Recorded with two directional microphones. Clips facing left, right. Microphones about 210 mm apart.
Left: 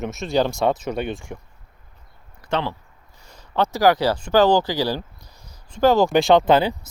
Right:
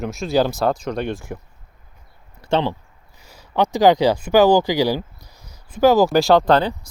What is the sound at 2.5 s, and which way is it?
Speech, 25° right (ahead or behind).